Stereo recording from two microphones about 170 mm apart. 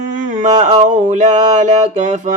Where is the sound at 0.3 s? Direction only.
50° right (ahead or behind).